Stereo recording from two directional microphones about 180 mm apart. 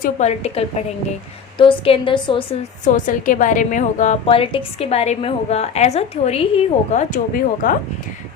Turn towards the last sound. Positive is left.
turn(degrees=50)  # may be behind; listen again after turning